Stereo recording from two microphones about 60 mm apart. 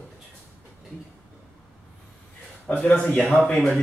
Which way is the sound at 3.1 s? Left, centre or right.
Centre.